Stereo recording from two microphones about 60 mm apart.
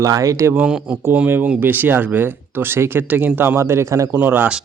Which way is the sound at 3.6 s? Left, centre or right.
Right.